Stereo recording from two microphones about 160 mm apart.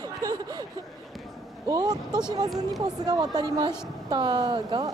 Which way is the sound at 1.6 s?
25° right (ahead or behind).